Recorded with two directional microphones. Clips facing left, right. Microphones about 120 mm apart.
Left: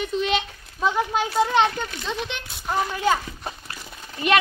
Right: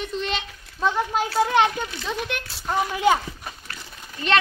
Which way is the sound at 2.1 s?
5° right (ahead or behind).